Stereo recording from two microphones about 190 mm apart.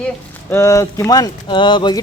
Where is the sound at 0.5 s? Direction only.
15° left (ahead or behind).